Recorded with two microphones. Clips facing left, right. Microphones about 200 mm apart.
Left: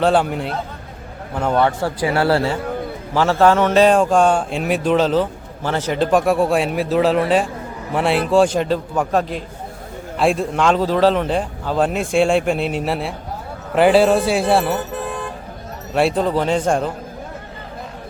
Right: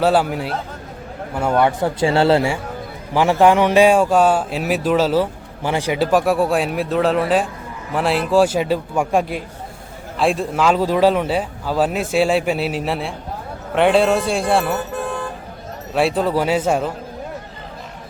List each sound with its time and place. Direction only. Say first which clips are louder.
0.0 s a man's voice: even; 5° right (ahead or behind)
2.0 s a man's voice: right 2 dB; 25° right (ahead or behind); by 14.8 s centre (ahead or behind)
16.0 s speech: even; centre (ahead or behind)